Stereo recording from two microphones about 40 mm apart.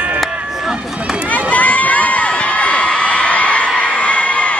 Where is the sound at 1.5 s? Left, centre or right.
Left.